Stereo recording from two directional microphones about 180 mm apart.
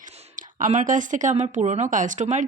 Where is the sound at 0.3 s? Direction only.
45° right (ahead or behind).